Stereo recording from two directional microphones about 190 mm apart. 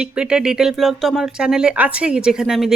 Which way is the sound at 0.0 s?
5° right (ahead or behind).